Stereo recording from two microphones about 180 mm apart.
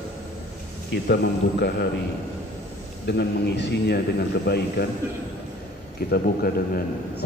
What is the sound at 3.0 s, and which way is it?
A man's voice, 70° left (ahead or behind).